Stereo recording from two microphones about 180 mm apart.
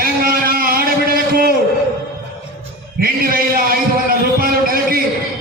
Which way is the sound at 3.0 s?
55° right (ahead or behind).